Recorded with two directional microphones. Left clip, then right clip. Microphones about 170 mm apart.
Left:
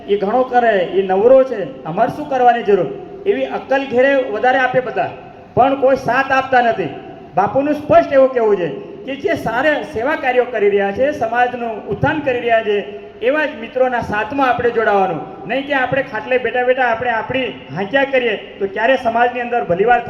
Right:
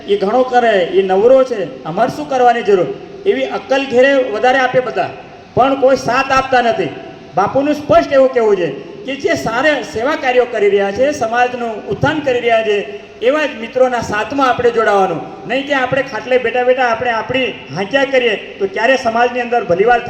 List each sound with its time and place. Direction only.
0.1 s a man's voice: 25° right (ahead or behind)